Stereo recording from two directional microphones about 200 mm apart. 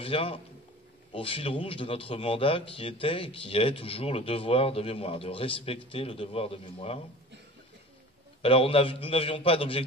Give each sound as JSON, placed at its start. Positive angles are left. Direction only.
{"t": 0.0, "sound": "a man's voice", "side_deg": 25}
{"t": 8.4, "sound": "speech", "side_deg": 30}